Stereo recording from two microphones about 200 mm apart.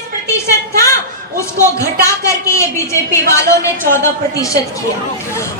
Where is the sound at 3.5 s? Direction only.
15° left (ahead or behind).